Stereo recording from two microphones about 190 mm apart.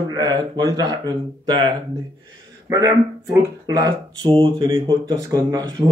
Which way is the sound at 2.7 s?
20° right (ahead or behind).